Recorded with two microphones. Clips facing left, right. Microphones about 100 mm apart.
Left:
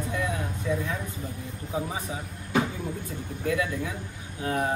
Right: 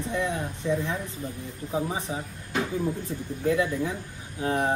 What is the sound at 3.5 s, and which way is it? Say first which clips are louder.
Speech: right 3 dB; 25° right (ahead or behind).